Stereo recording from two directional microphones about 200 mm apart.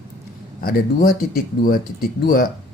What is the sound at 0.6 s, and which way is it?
Speech, 45° left (ahead or behind).